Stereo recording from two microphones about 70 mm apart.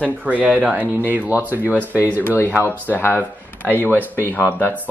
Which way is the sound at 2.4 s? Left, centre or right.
Left.